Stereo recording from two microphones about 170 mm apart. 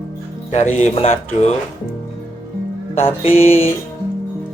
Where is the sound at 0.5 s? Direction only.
40° left (ahead or behind).